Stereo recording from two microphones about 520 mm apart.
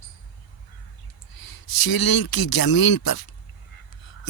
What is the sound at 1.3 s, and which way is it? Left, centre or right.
Speech, left.